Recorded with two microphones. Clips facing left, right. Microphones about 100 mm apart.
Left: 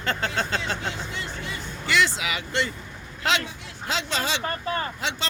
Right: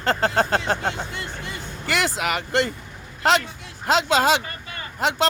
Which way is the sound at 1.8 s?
45° right (ahead or behind).